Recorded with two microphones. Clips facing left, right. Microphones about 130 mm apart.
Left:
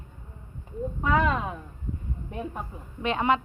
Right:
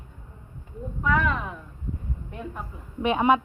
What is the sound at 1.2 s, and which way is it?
Speech, 25° left (ahead or behind).